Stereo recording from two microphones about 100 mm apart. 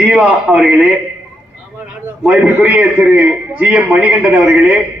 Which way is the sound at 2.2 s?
15° right (ahead or behind).